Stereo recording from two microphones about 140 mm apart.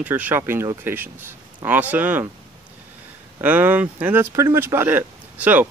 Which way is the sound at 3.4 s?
10° right (ahead or behind).